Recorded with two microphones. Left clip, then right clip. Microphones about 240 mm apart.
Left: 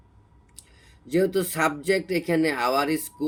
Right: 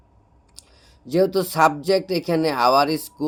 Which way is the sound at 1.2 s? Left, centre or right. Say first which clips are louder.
Right 4 dB; right.